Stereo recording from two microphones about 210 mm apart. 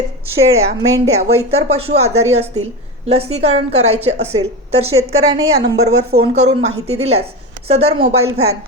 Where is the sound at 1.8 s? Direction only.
30° right (ahead or behind).